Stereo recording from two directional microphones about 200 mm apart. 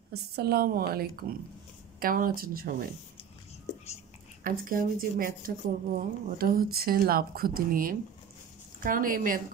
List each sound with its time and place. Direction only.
0.1 s speech: 50° right (ahead or behind)
4.4 s speech: 45° right (ahead or behind)